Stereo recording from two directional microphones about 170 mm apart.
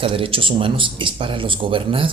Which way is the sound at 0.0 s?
30° right (ahead or behind).